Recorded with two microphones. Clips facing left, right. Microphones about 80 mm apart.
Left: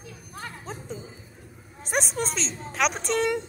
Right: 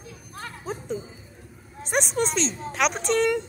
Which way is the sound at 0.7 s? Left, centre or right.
Centre.